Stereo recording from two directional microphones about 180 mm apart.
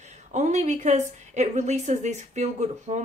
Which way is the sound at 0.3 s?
40° right (ahead or behind).